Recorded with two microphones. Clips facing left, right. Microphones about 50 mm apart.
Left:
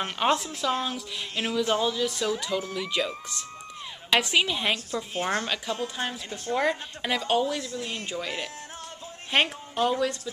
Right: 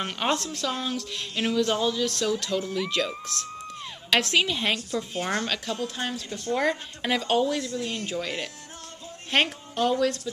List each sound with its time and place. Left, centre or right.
0.0 s a woman's voice: centre
4.7 s a woman's voice: centre